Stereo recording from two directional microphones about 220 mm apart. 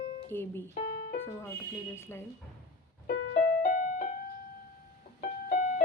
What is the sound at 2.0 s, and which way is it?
Speech, 10° left (ahead or behind).